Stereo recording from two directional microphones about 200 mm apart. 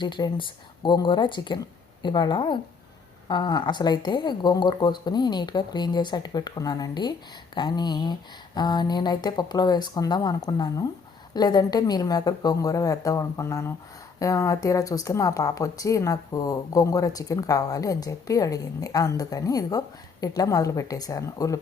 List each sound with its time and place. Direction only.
0.0 s speech: 25° left (ahead or behind)